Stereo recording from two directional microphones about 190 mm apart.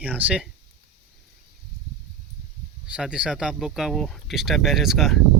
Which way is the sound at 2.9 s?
5° right (ahead or behind).